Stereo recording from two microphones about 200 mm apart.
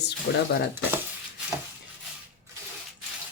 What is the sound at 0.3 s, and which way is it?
Speech, 50° left (ahead or behind).